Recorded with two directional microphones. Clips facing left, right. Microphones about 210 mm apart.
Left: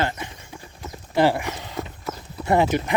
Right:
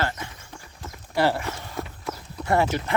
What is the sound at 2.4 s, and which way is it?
Speech, 20° left (ahead or behind).